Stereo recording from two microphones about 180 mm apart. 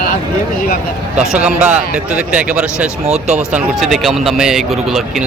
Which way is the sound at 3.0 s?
40° right (ahead or behind).